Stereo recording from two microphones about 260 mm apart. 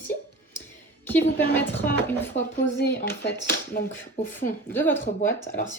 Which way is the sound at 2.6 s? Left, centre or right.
Left.